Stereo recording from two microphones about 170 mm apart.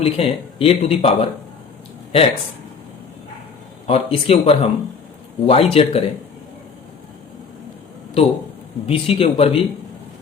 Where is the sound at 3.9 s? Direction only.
35° left (ahead or behind).